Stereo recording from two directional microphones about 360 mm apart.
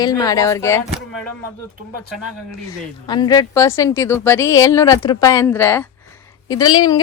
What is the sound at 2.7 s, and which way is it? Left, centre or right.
A woman's voice, centre.